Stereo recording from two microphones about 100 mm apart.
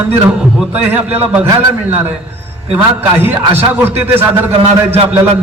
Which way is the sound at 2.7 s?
20° right (ahead or behind).